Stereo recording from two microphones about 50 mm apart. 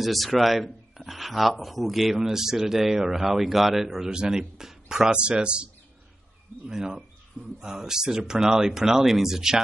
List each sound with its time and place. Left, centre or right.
0.0 s speech: centre; by 5.7 s right
6.7 s speech: centre